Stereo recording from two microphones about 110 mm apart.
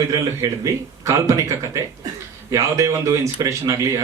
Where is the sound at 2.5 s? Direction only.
25° right (ahead or behind).